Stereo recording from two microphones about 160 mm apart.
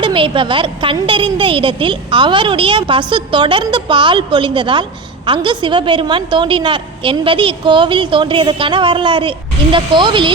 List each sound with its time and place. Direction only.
0.0 s a woman's voice: 35° right (ahead or behind)